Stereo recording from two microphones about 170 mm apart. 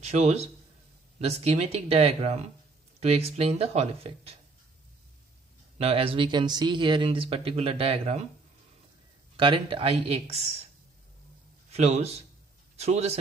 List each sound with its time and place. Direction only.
0.0 s a man's voice: 40° right (ahead or behind)
5.8 s speech: 35° right (ahead or behind)
9.4 s speech: 30° right (ahead or behind)
11.7 s speech: 40° right (ahead or behind)